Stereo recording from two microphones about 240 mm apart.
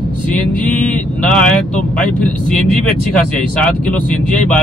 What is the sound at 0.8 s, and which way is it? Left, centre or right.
Speech, centre.